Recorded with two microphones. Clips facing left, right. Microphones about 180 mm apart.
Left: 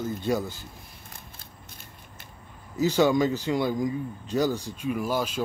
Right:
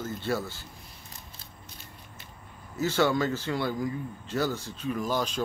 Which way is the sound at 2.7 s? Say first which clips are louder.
Left 4 dB; 15° left (ahead or behind).